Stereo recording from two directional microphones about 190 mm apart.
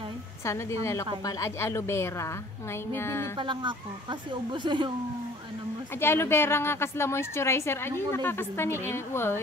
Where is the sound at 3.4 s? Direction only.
25° right (ahead or behind).